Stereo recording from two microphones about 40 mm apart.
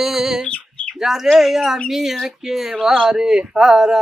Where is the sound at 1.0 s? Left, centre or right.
Centre.